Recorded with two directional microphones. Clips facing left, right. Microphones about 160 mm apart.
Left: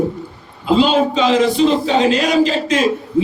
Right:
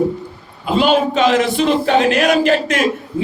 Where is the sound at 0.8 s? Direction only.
60° right (ahead or behind).